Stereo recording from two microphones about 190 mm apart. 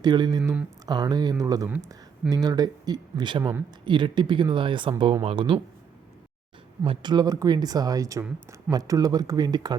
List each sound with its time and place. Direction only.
0.0 s speech: 20° right (ahead or behind)
6.8 s speech: 25° right (ahead or behind)
8.2 s speech: 5° right (ahead or behind)
8.7 s speech: 20° right (ahead or behind)